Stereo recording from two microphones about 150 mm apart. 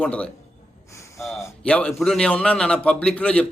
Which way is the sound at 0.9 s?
20° left (ahead or behind).